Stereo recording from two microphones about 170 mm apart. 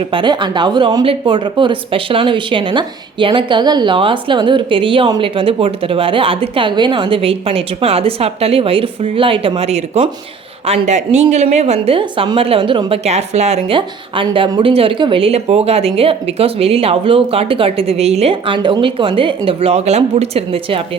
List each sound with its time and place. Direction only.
0.1 s speech: 30° right (ahead or behind)